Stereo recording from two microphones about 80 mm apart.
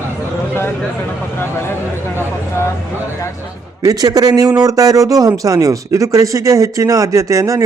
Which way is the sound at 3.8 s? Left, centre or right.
Right.